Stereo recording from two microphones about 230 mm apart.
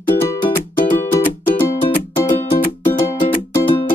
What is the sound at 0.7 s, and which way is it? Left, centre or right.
Music, left.